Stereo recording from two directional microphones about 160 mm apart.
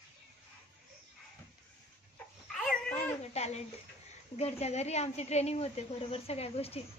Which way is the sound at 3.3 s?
45° left (ahead or behind).